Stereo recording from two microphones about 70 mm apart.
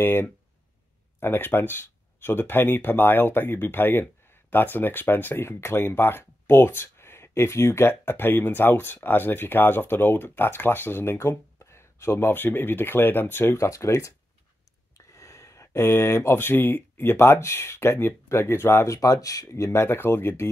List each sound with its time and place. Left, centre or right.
0.0 s speech: left
13.6 s speech: left
18.9 s speech: left